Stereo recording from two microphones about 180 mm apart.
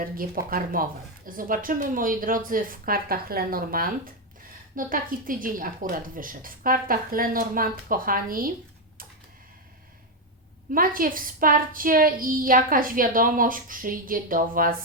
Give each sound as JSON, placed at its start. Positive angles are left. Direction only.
{"t": 0.0, "sound": "speech", "side_deg": -55}
{"t": 10.7, "sound": "speech", "side_deg": -50}